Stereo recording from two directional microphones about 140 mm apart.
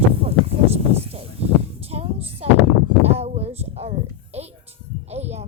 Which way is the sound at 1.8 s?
45° right (ahead or behind).